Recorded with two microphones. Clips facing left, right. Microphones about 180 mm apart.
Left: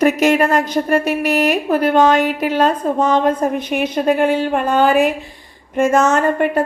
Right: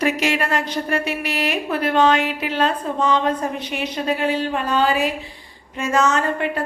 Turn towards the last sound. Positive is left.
turn(degrees=50)  # may be behind; listen again after turning